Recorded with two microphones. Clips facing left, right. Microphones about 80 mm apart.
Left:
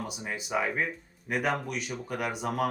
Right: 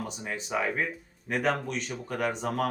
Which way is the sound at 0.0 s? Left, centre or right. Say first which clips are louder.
Right 1 dB; centre.